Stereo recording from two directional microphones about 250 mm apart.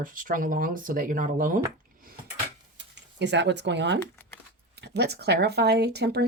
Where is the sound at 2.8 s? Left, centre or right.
Right.